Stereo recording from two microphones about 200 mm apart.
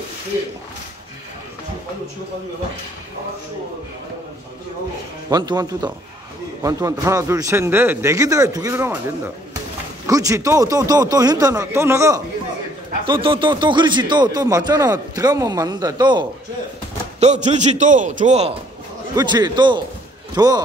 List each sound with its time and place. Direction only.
5.3 s a man's voice: 20° right (ahead or behind)
13.0 s speech: 25° right (ahead or behind)
17.2 s a man's voice: 35° right (ahead or behind)
19.1 s speech: 20° right (ahead or behind)